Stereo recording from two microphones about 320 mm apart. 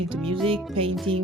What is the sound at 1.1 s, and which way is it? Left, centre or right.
Speech, centre.